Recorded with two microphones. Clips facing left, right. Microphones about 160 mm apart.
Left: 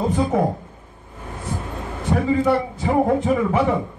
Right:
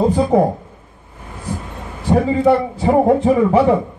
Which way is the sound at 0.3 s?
35° right (ahead or behind).